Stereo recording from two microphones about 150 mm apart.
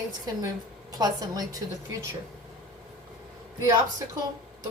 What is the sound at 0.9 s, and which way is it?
Speech, 25° right (ahead or behind).